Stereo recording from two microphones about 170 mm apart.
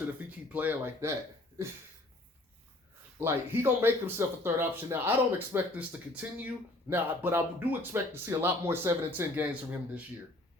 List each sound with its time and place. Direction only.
0.3 s speech: 10° right (ahead or behind)
3.2 s speech: 15° right (ahead or behind)